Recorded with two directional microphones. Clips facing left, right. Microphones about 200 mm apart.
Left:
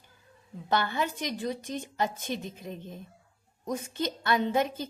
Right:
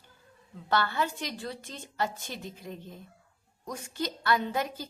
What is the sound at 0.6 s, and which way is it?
A woman's voice, 15° left (ahead or behind).